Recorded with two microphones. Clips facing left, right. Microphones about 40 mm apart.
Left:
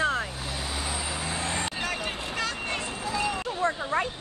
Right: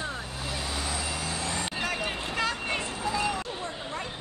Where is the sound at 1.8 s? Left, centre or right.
Centre.